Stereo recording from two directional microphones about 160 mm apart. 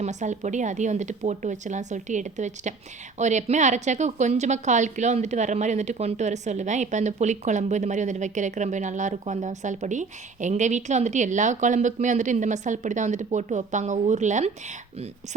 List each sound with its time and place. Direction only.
0.0 s a woman's voice: 45° right (ahead or behind)